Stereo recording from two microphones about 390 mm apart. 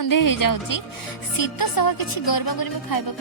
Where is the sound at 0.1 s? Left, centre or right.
Left.